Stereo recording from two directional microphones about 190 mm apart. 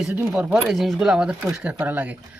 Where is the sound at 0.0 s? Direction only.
5° right (ahead or behind).